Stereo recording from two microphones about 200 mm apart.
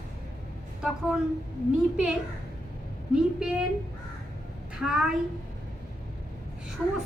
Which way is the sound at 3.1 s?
5° right (ahead or behind).